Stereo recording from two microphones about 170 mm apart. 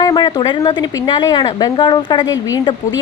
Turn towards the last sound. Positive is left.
turn(degrees=20)  # may be behind; listen again after turning